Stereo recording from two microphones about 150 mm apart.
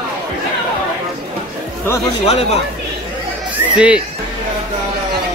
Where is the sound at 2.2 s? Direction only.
45° left (ahead or behind).